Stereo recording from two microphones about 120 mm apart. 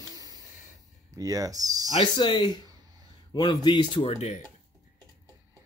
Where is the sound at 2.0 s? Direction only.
40° left (ahead or behind).